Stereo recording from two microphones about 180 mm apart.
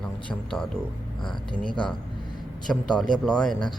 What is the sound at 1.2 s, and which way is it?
Speech, 25° left (ahead or behind).